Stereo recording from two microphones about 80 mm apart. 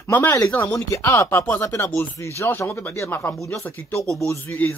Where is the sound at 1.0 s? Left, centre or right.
Left.